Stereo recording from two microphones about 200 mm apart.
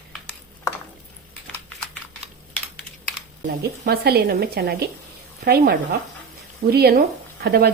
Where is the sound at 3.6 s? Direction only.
50° right (ahead or behind).